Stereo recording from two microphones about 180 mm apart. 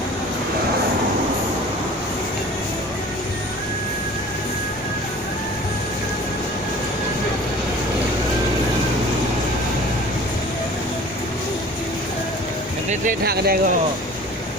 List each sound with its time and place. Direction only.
12.9 s speech: 55° right (ahead or behind)